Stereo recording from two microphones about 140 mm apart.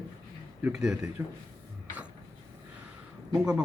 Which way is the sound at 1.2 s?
15° right (ahead or behind).